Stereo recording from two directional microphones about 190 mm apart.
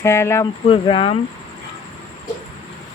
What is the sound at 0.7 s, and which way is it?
Speech, 25° left (ahead or behind).